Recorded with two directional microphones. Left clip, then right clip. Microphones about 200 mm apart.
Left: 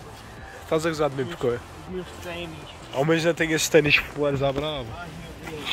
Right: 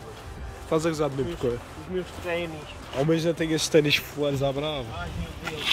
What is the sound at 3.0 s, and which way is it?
Speech, centre (ahead or behind).